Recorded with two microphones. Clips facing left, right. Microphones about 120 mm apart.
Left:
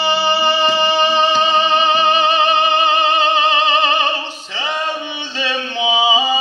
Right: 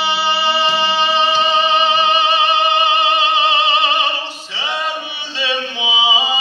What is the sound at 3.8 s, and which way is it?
Opera, 40° left (ahead or behind).